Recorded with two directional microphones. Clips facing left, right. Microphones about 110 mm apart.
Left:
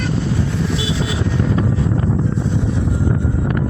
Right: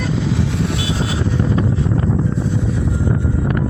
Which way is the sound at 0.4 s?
70° right (ahead or behind).